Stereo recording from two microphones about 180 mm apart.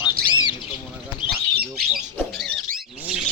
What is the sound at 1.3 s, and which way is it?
Squawk, 60° right (ahead or behind).